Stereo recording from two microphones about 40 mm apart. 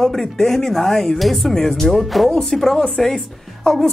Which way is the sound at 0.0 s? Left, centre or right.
Centre.